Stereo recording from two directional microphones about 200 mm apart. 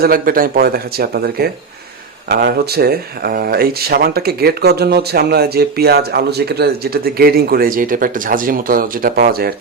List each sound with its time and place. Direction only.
0.0 s speech: 45° right (ahead or behind)